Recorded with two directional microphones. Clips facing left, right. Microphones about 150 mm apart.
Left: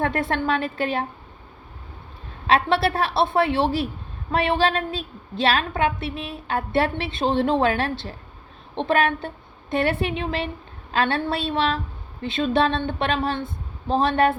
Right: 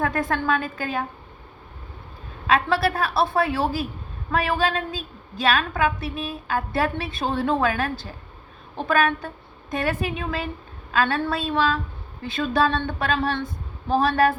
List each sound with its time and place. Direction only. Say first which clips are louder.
0.0 s a woman's voice: left 1 dB; 25° left (ahead or behind)
2.5 s a woman's voice: left 1 dB; 25° left (ahead or behind)